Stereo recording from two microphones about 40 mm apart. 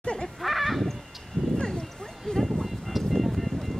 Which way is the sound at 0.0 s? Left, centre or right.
Left.